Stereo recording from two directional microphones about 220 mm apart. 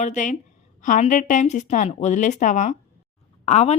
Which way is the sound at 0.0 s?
35° left (ahead or behind).